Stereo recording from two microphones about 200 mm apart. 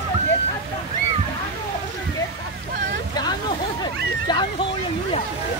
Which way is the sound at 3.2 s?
20° left (ahead or behind).